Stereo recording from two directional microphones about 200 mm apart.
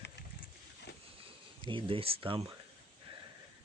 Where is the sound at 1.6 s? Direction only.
25° right (ahead or behind).